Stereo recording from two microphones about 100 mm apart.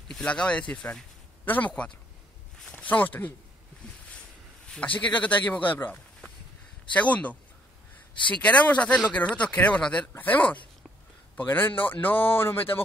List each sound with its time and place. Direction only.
0.1 s speech: 10° left (ahead or behind)
4.6 s a man's voice: 15° left (ahead or behind)